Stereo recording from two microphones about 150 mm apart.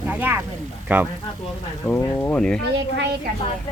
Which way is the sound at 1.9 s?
10° left (ahead or behind).